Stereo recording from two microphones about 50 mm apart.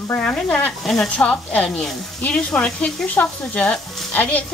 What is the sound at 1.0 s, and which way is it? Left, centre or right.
Speech, left.